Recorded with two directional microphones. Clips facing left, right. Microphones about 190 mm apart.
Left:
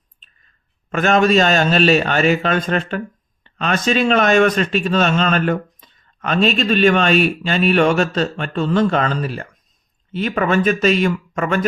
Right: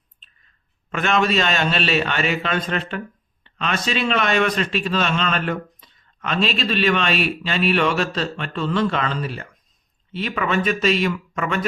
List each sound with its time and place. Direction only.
0.9 s a man's voice: 45° left (ahead or behind)